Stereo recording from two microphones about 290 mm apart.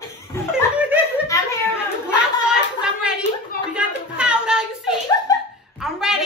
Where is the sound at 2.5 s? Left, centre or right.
Centre.